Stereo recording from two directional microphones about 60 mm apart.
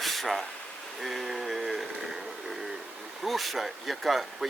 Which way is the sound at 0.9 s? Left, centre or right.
Centre.